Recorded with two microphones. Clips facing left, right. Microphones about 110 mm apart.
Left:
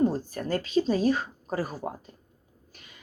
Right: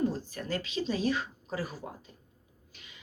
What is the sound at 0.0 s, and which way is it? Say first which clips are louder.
A woman's voice: left 6 dB; 45° left (ahead or behind).